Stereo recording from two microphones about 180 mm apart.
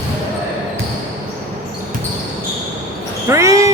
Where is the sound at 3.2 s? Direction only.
15° right (ahead or behind).